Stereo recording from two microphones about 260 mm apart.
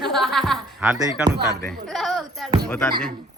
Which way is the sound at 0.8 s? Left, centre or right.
Centre.